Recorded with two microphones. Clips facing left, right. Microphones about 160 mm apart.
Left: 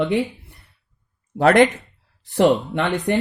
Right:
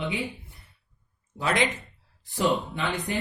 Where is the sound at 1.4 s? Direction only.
65° left (ahead or behind).